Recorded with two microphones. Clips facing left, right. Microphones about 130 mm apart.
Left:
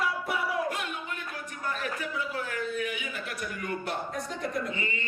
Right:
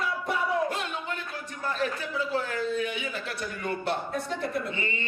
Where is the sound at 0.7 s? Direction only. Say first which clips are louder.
Right 2 dB; 30° right (ahead or behind).